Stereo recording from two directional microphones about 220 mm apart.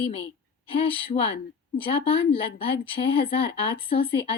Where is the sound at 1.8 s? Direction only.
25° left (ahead or behind).